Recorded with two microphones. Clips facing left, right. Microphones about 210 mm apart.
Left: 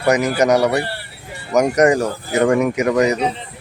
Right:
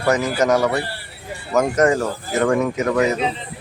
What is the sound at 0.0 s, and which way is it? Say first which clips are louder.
Speech: left 3 dB; 15° left (ahead or behind).